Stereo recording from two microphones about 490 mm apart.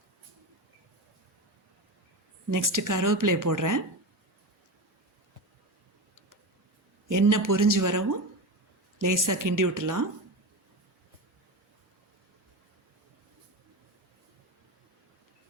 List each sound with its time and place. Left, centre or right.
2.5 s a woman's voice: right
7.1 s a woman's voice: right